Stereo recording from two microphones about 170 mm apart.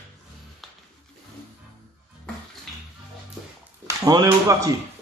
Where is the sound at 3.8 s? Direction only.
20° right (ahead or behind).